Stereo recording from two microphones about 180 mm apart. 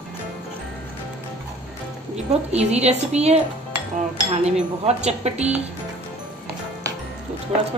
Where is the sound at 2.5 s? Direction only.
35° right (ahead or behind).